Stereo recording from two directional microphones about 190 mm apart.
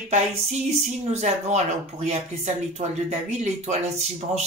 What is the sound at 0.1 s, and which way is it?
Speech, 35° right (ahead or behind).